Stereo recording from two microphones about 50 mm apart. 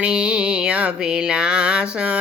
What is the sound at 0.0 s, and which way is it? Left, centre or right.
Speech, right.